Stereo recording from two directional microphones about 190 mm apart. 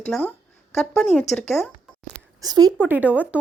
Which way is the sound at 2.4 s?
20° right (ahead or behind).